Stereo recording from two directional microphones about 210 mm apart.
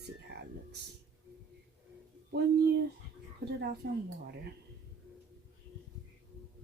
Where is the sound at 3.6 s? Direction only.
50° right (ahead or behind).